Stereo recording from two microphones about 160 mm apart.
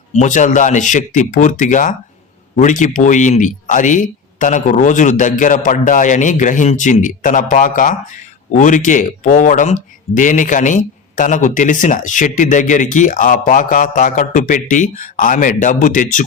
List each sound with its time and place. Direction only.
0.2 s a man's voice: 50° left (ahead or behind)